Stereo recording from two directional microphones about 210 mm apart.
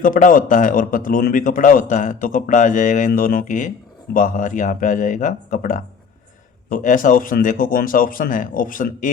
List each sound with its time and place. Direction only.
0.0 s speech: 40° left (ahead or behind)